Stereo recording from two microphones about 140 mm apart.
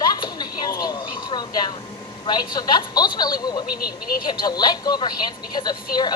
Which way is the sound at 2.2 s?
30° left (ahead or behind).